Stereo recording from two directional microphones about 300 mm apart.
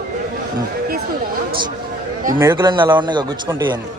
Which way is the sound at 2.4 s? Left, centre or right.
Centre.